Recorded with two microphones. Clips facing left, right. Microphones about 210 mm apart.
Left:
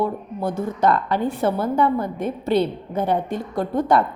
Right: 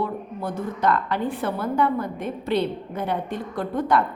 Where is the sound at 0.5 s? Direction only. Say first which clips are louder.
Left 3 dB; 40° left (ahead or behind).